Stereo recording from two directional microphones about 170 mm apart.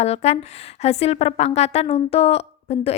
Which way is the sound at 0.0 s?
40° left (ahead or behind).